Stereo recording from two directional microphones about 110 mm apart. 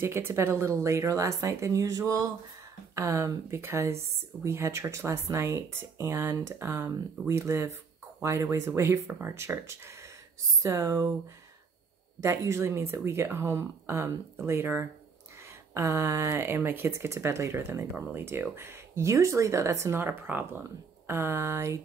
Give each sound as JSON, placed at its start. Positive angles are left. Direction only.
{"t": 0.0, "sound": "speech", "side_deg": -20}
{"t": 12.2, "sound": "speech", "side_deg": -30}